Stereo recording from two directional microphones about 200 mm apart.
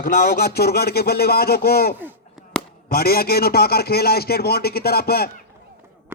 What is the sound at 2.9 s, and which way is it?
Speech, 50° left (ahead or behind).